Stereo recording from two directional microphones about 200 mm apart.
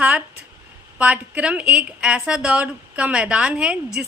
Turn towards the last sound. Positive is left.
turn(degrees=-5)  # may be behind; listen again after turning